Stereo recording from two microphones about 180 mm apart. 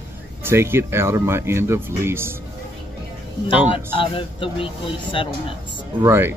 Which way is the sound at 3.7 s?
30° left (ahead or behind).